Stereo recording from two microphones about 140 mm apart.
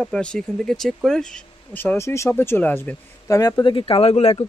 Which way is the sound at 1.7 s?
15° left (ahead or behind).